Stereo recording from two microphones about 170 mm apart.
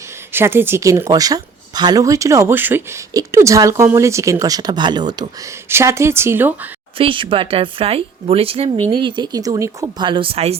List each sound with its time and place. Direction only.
0.3 s speech: 15° right (ahead or behind)
5.6 s a woman's voice: 15° right (ahead or behind)
7.0 s speech: 30° right (ahead or behind)